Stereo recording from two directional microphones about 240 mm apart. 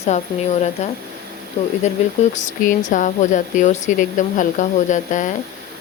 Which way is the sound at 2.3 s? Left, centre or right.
Left.